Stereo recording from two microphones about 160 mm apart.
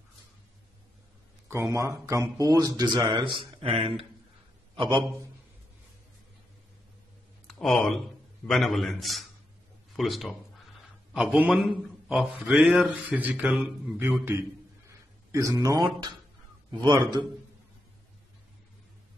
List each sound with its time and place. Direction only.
1.5 s a man's voice: 20° right (ahead or behind)
7.4 s a man's voice: 5° left (ahead or behind)
15.3 s speech: 20° right (ahead or behind)